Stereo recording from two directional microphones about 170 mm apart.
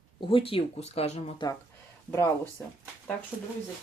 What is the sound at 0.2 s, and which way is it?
Speech, 30° left (ahead or behind).